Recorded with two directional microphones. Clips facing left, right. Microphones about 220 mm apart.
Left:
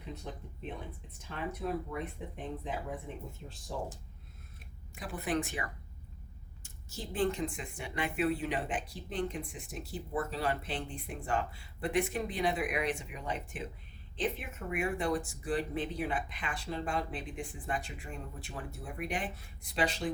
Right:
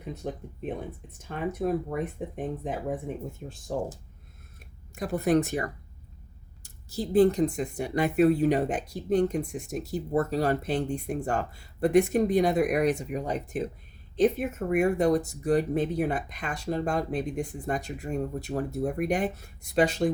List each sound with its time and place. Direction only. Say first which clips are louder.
0.0 s speech: right 8 dB; 50° right (ahead or behind)
4.9 s speech: right 10 dB; 45° right (ahead or behind)